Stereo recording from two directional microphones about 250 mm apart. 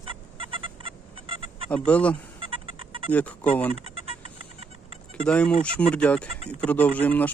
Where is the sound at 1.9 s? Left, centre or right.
Centre.